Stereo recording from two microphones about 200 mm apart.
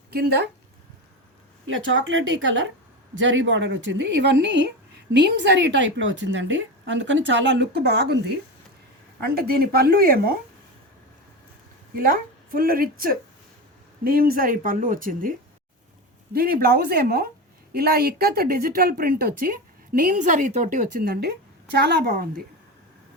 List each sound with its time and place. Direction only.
0.1 s a woman's voice: 50° right (ahead or behind)
1.6 s a woman's voice: 75° right (ahead or behind); by 8.2 s 55° right (ahead or behind)
9.2 s a woman's voice: 50° right (ahead or behind)
11.9 s a woman's voice: 45° right (ahead or behind)